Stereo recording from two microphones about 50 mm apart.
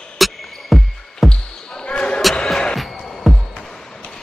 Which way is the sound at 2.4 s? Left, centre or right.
Centre.